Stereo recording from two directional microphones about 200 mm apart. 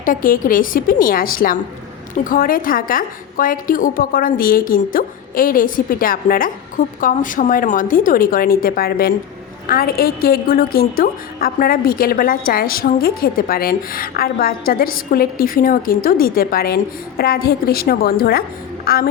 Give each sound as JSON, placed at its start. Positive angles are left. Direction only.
{"t": 0.0, "sound": "a woman's voice", "side_deg": 45}